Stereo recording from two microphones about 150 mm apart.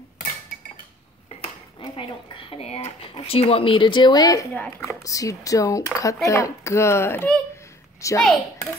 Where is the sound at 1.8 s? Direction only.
30° left (ahead or behind).